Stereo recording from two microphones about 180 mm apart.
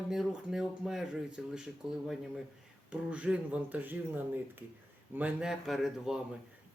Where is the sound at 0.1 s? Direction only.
Centre (ahead or behind).